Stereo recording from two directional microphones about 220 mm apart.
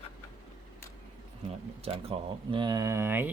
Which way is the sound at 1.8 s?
25° right (ahead or behind).